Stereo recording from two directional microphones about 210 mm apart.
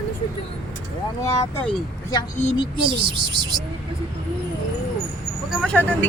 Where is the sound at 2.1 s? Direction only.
20° left (ahead or behind).